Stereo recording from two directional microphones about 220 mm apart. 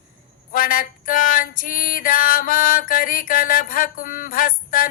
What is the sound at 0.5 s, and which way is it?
Male singing, 40° left (ahead or behind).